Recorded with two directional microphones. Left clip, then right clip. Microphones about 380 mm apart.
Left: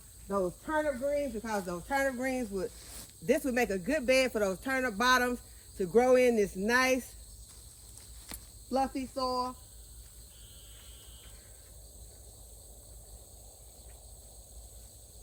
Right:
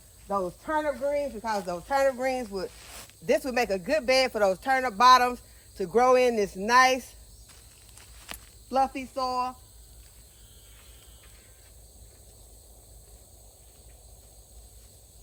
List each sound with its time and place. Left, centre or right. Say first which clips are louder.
0.3 s speech: right 4 dB; centre
8.3 s speech: right 4 dB; centre